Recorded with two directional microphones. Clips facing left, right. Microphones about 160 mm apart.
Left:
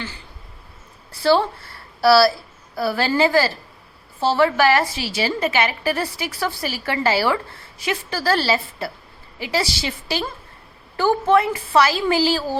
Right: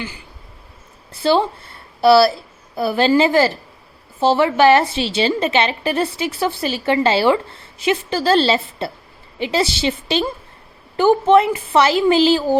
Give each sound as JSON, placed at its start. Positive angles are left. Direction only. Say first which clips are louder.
{"t": 1.1, "sound": "a woman's voice", "louder": "right 1 dB", "side_deg": -20}